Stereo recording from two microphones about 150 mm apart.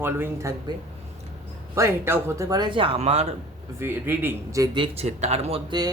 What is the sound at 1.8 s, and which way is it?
Speech, 15° right (ahead or behind).